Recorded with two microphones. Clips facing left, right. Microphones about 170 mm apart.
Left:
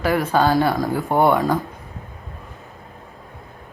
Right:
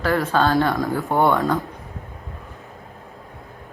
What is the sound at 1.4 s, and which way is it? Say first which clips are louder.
Speech: left 1 dB; centre (ahead or behind).